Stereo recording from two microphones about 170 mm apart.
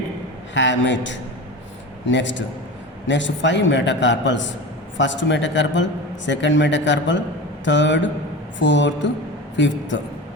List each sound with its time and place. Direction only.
0.5 s a man's voice: 90° left